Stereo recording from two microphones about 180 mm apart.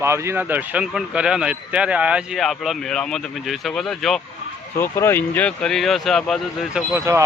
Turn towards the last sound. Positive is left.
turn(degrees=-15)  # may be behind; listen again after turning